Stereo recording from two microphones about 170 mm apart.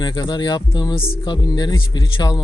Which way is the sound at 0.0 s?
25° left (ahead or behind).